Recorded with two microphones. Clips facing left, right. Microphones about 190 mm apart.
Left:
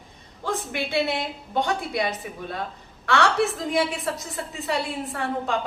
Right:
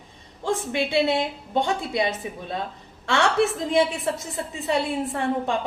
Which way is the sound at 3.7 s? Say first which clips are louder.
Right 3 dB; 25° right (ahead or behind).